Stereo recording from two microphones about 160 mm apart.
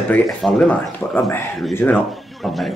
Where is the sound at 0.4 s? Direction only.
10° left (ahead or behind).